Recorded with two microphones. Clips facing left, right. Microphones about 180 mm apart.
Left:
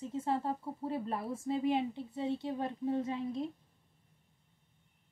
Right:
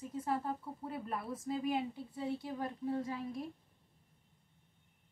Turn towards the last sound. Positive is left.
turn(degrees=25)  # may be behind; listen again after turning